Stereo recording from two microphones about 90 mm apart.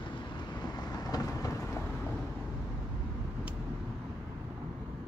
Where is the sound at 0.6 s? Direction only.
50° left (ahead or behind).